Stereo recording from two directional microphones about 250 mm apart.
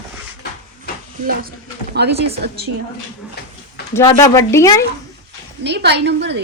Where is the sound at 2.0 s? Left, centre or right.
Right.